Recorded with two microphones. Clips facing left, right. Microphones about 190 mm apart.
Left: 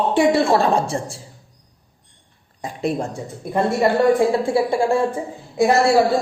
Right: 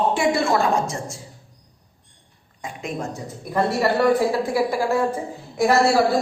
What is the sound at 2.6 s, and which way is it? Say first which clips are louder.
A man's voice: left 6 dB; 35° left (ahead or behind).